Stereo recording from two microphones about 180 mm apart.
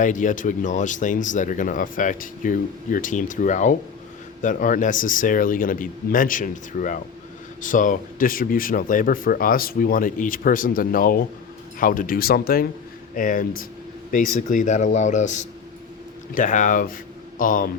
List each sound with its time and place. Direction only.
0.0 s speech: 45° left (ahead or behind)